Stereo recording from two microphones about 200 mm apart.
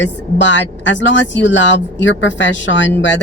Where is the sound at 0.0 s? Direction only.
65° left (ahead or behind).